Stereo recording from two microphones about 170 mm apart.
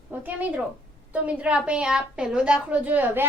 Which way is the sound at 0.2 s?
10° right (ahead or behind).